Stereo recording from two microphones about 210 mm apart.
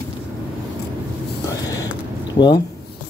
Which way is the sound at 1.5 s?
15° left (ahead or behind).